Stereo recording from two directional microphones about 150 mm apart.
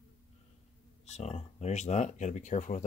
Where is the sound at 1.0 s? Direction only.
45° left (ahead or behind).